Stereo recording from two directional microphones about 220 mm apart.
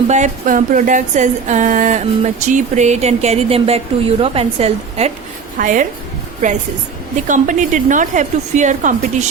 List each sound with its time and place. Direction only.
0.1 s speech: 35° right (ahead or behind)
7.3 s speech: 35° right (ahead or behind)